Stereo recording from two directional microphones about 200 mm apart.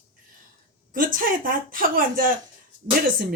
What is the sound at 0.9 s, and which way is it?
Speech, 45° right (ahead or behind).